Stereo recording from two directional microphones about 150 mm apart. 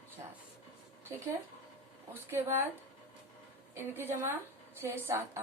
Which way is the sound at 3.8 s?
15° right (ahead or behind).